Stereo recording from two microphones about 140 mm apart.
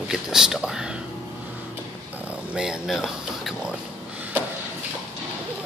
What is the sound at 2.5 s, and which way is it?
Speech, 5° right (ahead or behind).